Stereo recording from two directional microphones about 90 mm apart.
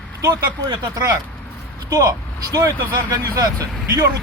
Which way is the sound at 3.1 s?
40° right (ahead or behind).